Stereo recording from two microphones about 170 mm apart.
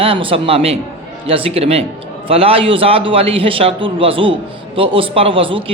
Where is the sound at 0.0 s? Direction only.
30° right (ahead or behind).